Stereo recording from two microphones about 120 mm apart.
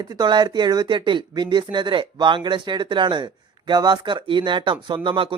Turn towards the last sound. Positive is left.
turn(degrees=-45)  # may be behind; listen again after turning